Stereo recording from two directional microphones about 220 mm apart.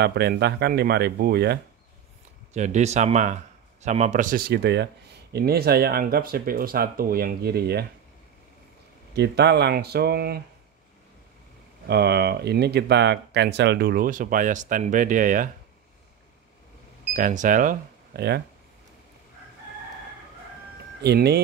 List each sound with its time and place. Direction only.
0.0 s speech: 45° right (ahead or behind)
2.5 s speech: 30° right (ahead or behind)
9.1 s speech: 50° right (ahead or behind)
11.9 s speech: 50° right (ahead or behind)
17.1 s speech: 35° right (ahead or behind)
21.0 s speech: 45° right (ahead or behind)